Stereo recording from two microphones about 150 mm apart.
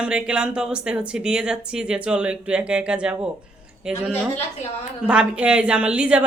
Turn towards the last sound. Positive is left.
turn(degrees=-5)  # may be behind; listen again after turning